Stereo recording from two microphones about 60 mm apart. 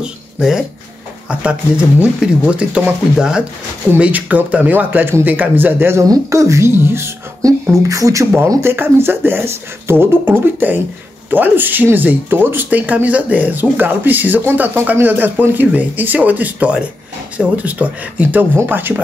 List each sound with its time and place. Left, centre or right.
0.0 s speech: centre
1.3 s speech: right
4.0 s speech: right
6.0 s speech: right
6.7 s speech: right
7.7 s speech: right
8.5 s speech: right